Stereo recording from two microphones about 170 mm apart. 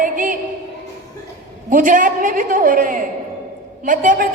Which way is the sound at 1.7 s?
50° right (ahead or behind).